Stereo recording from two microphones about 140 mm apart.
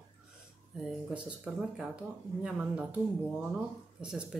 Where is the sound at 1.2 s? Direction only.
5° right (ahead or behind).